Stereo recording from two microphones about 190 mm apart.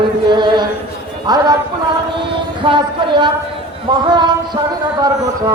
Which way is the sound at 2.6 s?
25° right (ahead or behind).